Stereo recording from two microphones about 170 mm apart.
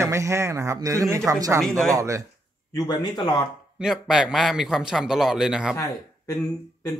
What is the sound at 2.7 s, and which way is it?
Speech, 25° left (ahead or behind).